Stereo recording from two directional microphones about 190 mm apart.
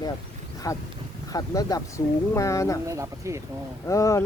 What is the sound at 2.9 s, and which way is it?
Speech, 15° right (ahead or behind).